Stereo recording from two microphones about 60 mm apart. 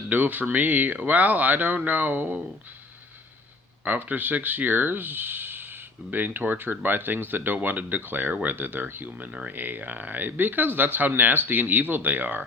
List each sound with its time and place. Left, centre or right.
0.1 s speech: right
3.8 s speech: right